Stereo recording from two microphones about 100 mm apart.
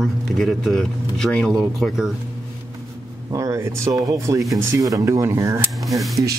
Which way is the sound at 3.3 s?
35° right (ahead or behind).